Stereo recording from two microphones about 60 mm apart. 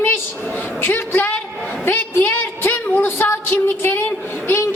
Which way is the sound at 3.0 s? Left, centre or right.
Left.